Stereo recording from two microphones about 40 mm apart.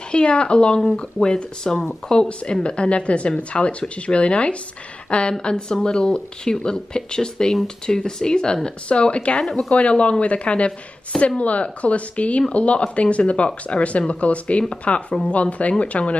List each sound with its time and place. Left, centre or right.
0.1 s speech: left
1.2 s speech: centre
8.8 s speech: left
9.7 s speech: left